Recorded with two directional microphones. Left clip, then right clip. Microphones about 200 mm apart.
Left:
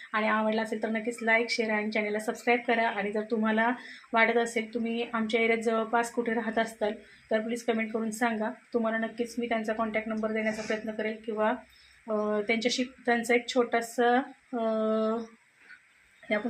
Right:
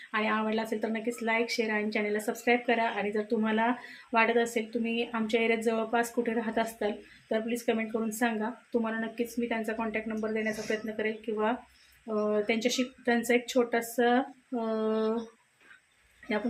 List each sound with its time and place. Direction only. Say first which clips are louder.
0.1 s speech: left 2 dB; 15° right (ahead or behind)